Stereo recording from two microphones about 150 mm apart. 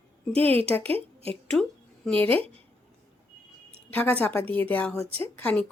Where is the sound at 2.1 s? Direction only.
10° left (ahead or behind).